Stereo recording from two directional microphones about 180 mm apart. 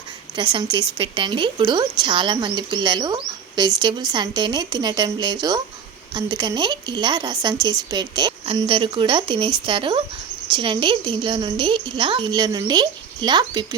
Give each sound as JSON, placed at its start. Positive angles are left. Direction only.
{"t": 0.3, "sound": "a woman's voice", "side_deg": -25}